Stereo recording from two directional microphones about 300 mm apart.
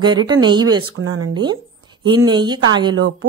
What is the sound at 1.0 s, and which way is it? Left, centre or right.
Speech, right.